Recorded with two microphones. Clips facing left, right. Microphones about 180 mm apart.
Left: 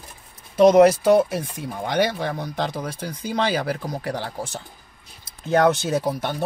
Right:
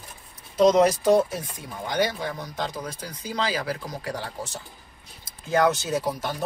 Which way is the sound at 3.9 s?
60° left (ahead or behind).